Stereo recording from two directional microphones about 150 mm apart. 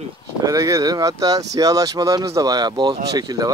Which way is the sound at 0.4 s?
25° right (ahead or behind).